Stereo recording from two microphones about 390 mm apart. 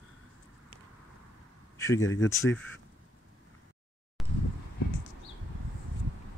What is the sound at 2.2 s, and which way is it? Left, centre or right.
Speech, centre.